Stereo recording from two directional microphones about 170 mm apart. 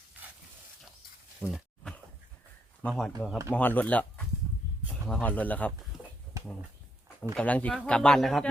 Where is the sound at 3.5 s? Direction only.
10° left (ahead or behind).